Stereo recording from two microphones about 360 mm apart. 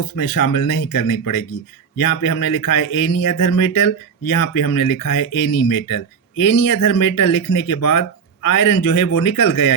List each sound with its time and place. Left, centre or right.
0.2 s speech: left